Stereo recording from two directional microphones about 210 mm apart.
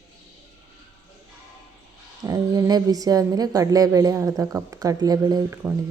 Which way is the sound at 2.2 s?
15° right (ahead or behind).